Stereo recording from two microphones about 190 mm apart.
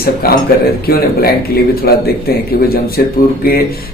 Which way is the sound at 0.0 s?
55° left (ahead or behind).